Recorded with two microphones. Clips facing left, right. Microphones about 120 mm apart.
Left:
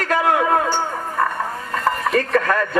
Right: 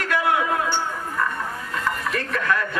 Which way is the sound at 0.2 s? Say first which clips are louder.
Left 5 dB; 45° left (ahead or behind).